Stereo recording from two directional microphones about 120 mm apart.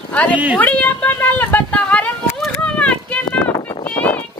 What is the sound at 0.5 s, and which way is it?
Speech, 15° left (ahead or behind).